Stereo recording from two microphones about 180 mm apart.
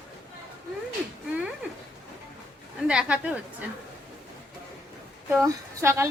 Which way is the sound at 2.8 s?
5° right (ahead or behind).